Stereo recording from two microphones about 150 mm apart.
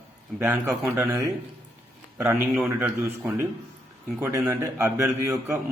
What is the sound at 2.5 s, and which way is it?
Speech, 10° right (ahead or behind).